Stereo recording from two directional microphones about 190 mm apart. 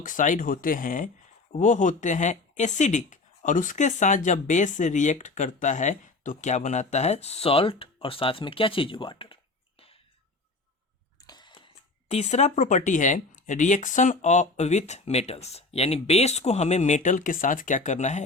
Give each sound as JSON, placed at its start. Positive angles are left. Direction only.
{"t": 0.0, "sound": "speech", "side_deg": 45}
{"t": 11.3, "sound": "speech", "side_deg": 25}